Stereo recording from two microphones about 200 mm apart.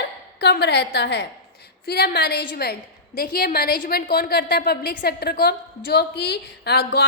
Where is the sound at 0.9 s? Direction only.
55° left (ahead or behind).